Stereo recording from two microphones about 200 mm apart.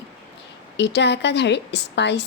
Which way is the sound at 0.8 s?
60° left (ahead or behind).